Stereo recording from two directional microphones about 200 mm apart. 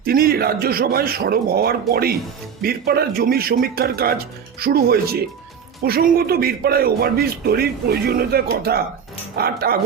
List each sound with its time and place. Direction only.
0.0 s a man's voice: 45° right (ahead or behind)